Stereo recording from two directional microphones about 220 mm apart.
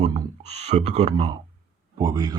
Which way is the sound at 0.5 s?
30° right (ahead or behind).